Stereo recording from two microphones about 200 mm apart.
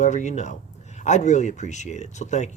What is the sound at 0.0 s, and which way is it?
Speech, 35° left (ahead or behind).